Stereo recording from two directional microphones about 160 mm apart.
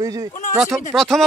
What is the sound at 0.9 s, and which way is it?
Speech, centre (ahead or behind).